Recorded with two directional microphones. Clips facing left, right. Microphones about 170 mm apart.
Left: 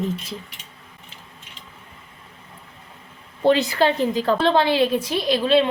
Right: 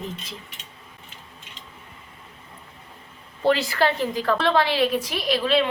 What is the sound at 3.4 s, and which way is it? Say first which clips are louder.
A woman's voice: left 3 dB; 20° left (ahead or behind).